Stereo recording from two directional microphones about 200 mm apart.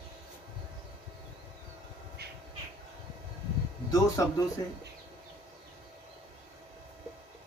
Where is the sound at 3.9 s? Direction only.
15° left (ahead or behind).